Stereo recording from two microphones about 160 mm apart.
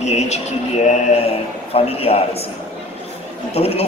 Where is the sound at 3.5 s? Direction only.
40° left (ahead or behind).